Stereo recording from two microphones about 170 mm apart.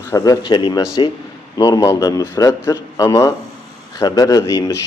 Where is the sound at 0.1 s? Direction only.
25° left (ahead or behind).